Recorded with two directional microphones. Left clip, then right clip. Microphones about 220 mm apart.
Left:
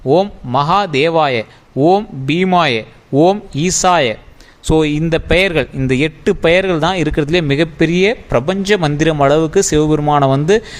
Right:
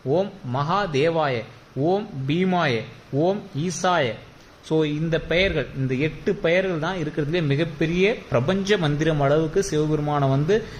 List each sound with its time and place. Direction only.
0.1 s a man's voice: 40° left (ahead or behind)